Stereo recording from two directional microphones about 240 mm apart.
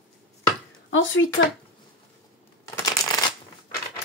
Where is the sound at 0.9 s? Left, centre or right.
Left.